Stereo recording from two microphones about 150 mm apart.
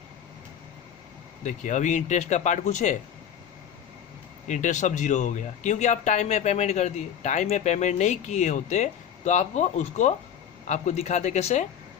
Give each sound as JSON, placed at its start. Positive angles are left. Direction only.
{"t": 1.5, "sound": "speech", "side_deg": 55}
{"t": 4.4, "sound": "speech", "side_deg": 55}